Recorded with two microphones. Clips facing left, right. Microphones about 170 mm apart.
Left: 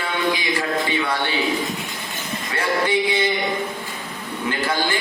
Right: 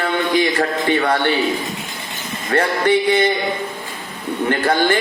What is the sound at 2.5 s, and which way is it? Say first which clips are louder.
Speech: right 6 dB; 55° right (ahead or behind).